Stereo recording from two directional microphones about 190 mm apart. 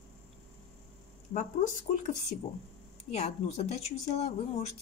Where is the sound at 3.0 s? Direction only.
35° left (ahead or behind).